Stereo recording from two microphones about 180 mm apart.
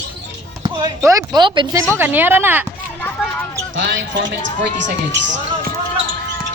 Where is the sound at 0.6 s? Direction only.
25° right (ahead or behind).